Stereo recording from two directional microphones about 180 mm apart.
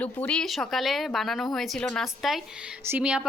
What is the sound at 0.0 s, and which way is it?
A woman's voice, 5° left (ahead or behind).